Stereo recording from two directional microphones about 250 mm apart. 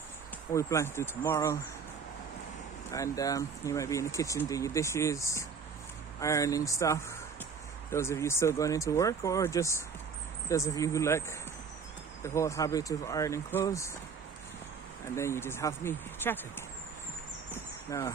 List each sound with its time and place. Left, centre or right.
0.5 s speech: centre
2.9 s speech: centre
15.1 s speech: centre
17.5 s a sound: centre